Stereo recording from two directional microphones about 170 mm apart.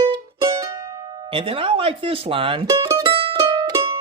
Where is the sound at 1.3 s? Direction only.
30° right (ahead or behind).